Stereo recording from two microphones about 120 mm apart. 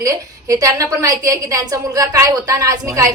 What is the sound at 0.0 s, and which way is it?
A woman's voice, 25° right (ahead or behind).